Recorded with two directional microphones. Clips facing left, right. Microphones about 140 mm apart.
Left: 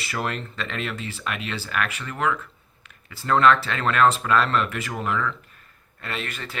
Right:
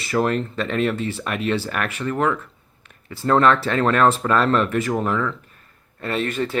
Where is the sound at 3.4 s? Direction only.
40° right (ahead or behind).